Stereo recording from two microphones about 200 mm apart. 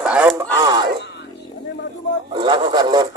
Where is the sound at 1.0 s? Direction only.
60° left (ahead or behind).